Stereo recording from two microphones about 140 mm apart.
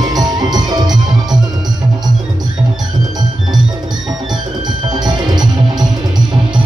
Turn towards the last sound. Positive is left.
turn(degrees=-30)  # may be behind; listen again after turning